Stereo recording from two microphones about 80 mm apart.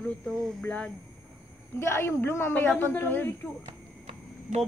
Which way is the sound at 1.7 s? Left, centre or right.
Left.